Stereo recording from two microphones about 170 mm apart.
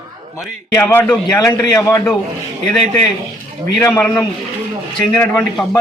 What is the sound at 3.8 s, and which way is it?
A man's voice, 10° left (ahead or behind).